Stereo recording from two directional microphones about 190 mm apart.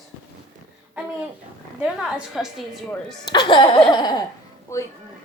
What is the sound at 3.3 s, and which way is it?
Speech, 20° left (ahead or behind).